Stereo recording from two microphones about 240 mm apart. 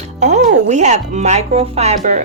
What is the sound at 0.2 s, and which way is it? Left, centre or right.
Speech, right.